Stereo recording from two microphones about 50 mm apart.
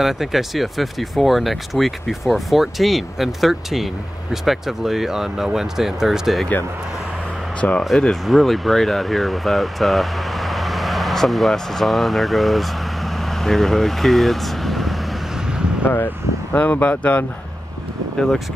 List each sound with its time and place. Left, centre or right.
0.0 s speech: centre
7.6 s speech: left
8.1 s speech: centre
15.8 s speech: left